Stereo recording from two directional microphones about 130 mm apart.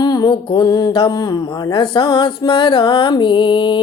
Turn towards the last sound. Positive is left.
turn(degrees=40)  # may be behind; listen again after turning